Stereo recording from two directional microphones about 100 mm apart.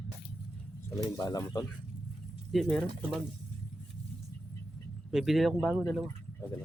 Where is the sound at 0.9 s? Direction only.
35° left (ahead or behind).